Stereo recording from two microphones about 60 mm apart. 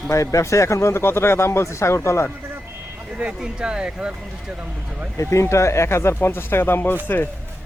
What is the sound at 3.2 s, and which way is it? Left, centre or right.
Speech, centre.